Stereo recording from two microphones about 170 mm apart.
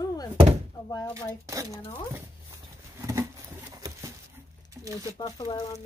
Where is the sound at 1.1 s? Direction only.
20° right (ahead or behind).